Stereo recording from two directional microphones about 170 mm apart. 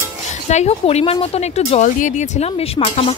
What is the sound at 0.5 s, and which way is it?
Speech, 40° left (ahead or behind).